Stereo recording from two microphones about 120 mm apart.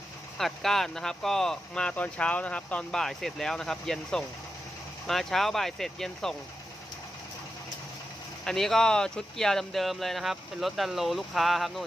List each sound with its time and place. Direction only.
0.3 s speech: centre (ahead or behind)
8.4 s speech: 5° left (ahead or behind)